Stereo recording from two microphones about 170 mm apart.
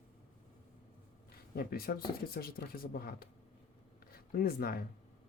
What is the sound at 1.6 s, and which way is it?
Speech, 60° left (ahead or behind).